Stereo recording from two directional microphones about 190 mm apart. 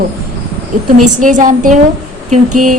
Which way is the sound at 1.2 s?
40° right (ahead or behind).